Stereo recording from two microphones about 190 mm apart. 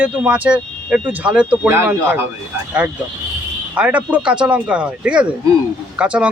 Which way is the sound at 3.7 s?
5° right (ahead or behind).